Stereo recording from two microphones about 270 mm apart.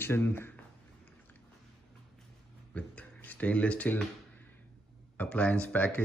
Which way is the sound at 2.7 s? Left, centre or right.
Centre.